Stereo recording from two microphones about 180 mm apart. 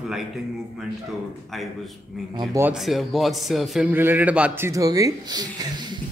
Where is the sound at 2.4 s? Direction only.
15° right (ahead or behind).